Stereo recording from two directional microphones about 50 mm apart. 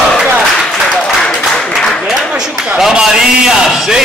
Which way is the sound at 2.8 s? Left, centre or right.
Centre.